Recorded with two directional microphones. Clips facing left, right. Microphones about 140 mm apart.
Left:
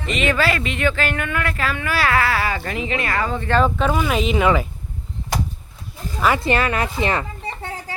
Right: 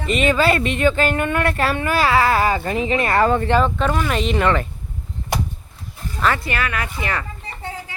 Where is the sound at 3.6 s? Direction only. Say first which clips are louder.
Left 1 dB; 5° left (ahead or behind).